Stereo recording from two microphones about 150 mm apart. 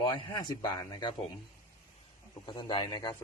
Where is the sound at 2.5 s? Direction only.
30° left (ahead or behind).